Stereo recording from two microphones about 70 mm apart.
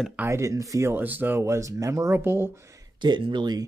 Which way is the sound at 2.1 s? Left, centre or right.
Right.